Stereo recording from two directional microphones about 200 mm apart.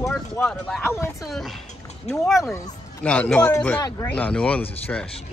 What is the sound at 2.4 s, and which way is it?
Speech, 10° left (ahead or behind).